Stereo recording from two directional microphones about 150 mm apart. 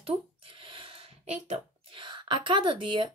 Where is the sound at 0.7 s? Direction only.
40° right (ahead or behind).